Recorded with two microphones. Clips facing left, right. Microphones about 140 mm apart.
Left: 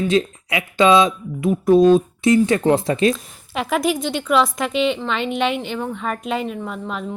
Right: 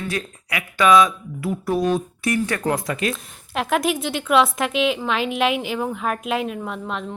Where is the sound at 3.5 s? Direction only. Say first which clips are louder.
Left 1 dB; centre (ahead or behind).